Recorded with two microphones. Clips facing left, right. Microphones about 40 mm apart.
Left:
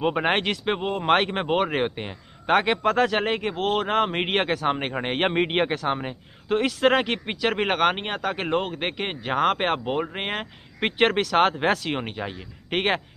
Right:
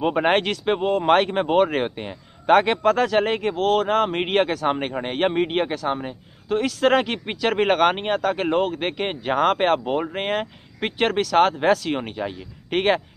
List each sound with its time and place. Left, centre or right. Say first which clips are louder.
0.0 s speech: right 3 dB; centre; by 6.7 s left
6.8 s speech: right 3 dB; centre
10.8 s speech: even; left